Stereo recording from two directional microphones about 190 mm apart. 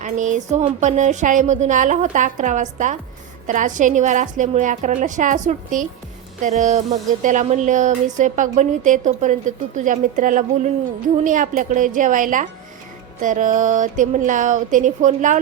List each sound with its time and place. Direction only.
0.0 s a woman's voice: 40° right (ahead or behind)